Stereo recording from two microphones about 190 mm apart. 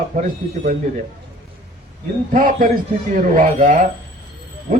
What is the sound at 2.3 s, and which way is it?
A man's voice, 45° right (ahead or behind).